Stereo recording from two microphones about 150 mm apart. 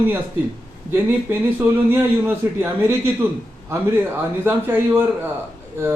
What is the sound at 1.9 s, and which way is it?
Speech, 15° right (ahead or behind).